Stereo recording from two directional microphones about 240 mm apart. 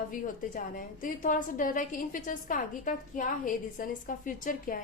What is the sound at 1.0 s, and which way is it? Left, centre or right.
A woman's voice, left.